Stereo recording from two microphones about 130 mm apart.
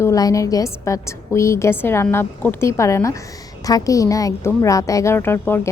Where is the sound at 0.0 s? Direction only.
25° left (ahead or behind).